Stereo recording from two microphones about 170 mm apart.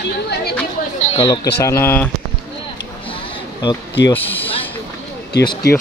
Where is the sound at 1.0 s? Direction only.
35° left (ahead or behind).